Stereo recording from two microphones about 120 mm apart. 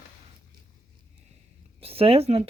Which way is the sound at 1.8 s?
55° right (ahead or behind).